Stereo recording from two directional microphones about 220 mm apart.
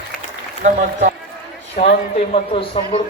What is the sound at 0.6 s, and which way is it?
Speech, 35° right (ahead or behind).